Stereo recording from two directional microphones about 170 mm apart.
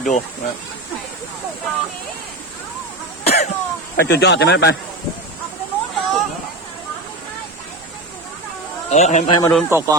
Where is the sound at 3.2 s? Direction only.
40° left (ahead or behind).